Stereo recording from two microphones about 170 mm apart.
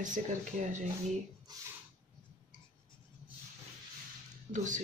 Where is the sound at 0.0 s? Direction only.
45° right (ahead or behind).